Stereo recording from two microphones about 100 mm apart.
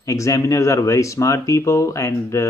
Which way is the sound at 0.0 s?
35° left (ahead or behind).